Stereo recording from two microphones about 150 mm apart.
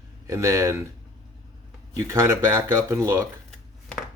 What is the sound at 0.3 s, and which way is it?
Speech, 20° right (ahead or behind).